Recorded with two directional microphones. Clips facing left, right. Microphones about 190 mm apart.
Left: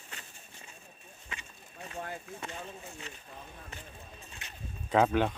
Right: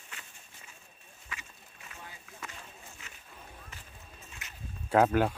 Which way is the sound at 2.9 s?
35° left (ahead or behind).